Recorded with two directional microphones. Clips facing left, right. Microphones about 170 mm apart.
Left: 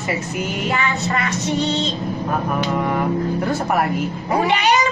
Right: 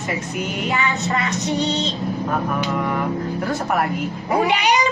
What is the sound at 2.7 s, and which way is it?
Music, 15° left (ahead or behind).